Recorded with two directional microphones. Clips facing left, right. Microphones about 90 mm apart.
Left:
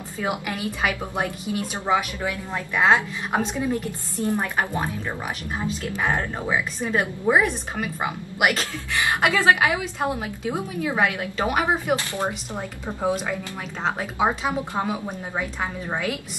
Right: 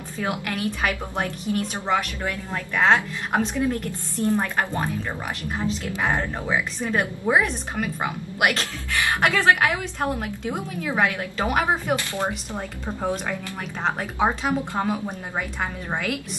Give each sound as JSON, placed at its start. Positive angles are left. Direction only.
{"t": 0.2, "sound": "a woman's voice", "side_deg": 10}
{"t": 6.4, "sound": "a woman's voice", "side_deg": 10}
{"t": 7.2, "sound": "a woman's voice", "side_deg": 0}
{"t": 12.0, "sound": "a woman's voice", "side_deg": 20}